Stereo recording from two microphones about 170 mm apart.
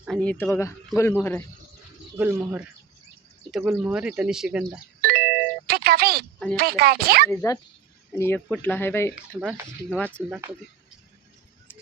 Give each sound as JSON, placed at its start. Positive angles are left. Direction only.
{"t": 0.0, "sound": "speech", "side_deg": 5}
{"t": 2.1, "sound": "speech", "side_deg": -10}
{"t": 4.9, "sound": "doorbell", "side_deg": -65}
{"t": 6.6, "sound": "a woman's voice", "side_deg": -65}
{"t": 7.3, "sound": "speech", "side_deg": 20}
{"t": 10.2, "sound": "speech", "side_deg": -10}